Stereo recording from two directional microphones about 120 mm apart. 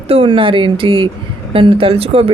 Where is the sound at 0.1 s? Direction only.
50° right (ahead or behind).